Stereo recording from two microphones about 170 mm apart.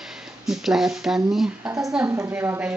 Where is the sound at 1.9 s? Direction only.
15° right (ahead or behind).